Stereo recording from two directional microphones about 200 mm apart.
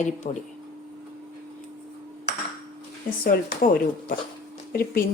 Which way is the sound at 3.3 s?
45° left (ahead or behind).